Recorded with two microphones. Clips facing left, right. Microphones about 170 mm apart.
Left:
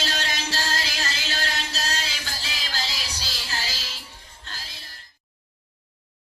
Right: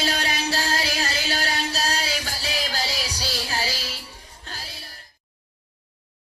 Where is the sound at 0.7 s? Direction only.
45° right (ahead or behind).